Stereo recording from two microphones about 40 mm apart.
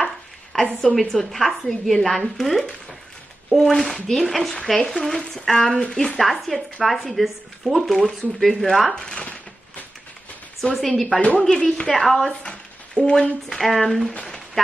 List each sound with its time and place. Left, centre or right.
0.5 s a woman's voice: centre
5.7 s speech: left
6.1 s speech: centre
8.9 s a woman's voice: centre
10.7 s speech: centre
11.3 s a woman's voice: centre
12.3 s a sound: left
13.5 s speech: centre
14.2 s a sound: centre